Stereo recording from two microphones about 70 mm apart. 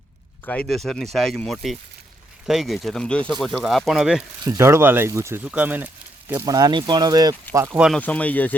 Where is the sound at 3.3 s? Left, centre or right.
Centre.